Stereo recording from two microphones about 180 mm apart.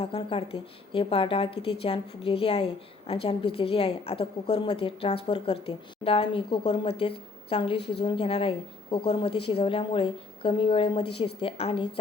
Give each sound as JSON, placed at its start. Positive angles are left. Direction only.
{"t": 0.0, "sound": "a woman's voice", "side_deg": 30}